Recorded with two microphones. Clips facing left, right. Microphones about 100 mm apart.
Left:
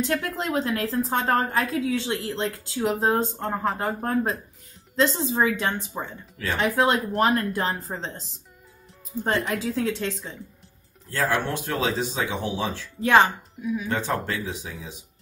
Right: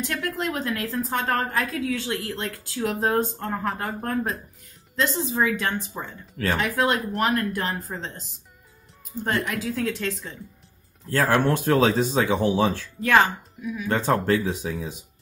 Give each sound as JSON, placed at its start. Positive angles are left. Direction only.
{"t": 0.0, "sound": "a woman's voice", "side_deg": 25}
{"t": 9.2, "sound": "a woman's voice", "side_deg": 30}
{"t": 11.1, "sound": "speech", "side_deg": -50}
{"t": 13.0, "sound": "a woman's voice", "side_deg": 25}
{"t": 14.2, "sound": "speech", "side_deg": -45}